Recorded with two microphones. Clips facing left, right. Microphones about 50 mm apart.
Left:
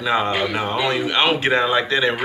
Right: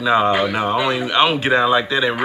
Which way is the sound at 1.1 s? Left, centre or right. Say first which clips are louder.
Right 3 dB; centre.